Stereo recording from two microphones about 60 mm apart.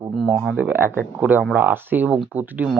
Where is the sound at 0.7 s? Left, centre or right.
Right.